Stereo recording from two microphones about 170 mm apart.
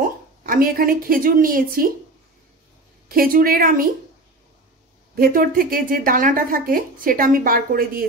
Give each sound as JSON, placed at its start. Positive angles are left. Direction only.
{"t": 0.4, "sound": "speech", "side_deg": -55}
{"t": 3.1, "sound": "speech", "side_deg": -60}
{"t": 5.1, "sound": "speech", "side_deg": -60}